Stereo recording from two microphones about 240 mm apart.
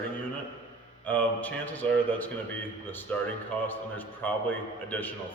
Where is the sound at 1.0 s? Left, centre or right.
Centre.